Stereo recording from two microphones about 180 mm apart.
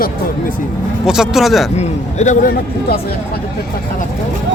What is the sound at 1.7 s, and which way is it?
A man's voice, 40° left (ahead or behind).